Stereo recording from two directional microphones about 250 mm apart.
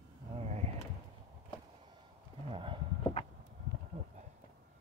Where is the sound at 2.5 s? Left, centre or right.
Right.